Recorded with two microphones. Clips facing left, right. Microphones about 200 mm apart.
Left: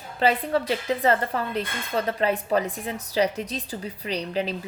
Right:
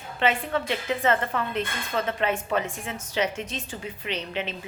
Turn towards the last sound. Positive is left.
turn(degrees=35)  # may be behind; listen again after turning